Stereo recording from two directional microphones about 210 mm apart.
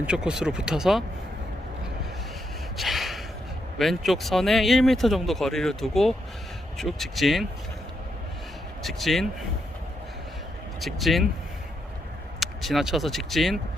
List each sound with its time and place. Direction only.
0.0 s speech: 5° right (ahead or behind)
2.7 s snort: centre (ahead or behind)
3.8 s speech: centre (ahead or behind)
8.8 s speech: centre (ahead or behind)
10.8 s speech: centre (ahead or behind)
12.4 s speech: centre (ahead or behind)